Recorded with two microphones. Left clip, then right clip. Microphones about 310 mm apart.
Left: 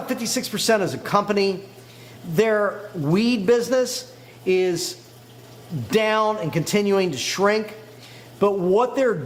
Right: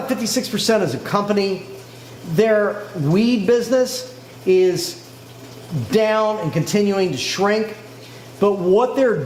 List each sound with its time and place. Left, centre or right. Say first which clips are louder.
0.1 s speech: right 3 dB; left
5.9 s speech: right 3 dB; left
8.4 s speech: right 3 dB; left